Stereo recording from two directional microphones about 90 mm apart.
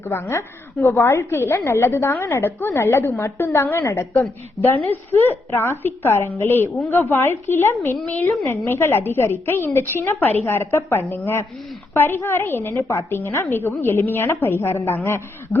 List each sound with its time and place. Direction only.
0.1 s a woman's voice: 30° left (ahead or behind)
4.2 s a woman's voice: 20° left (ahead or behind)
8.0 s a woman's voice: 20° left (ahead or behind)